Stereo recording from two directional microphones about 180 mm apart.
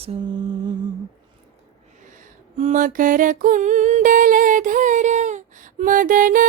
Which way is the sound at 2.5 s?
40° right (ahead or behind).